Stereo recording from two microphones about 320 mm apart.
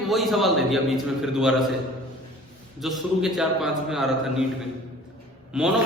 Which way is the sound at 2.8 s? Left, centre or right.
Centre.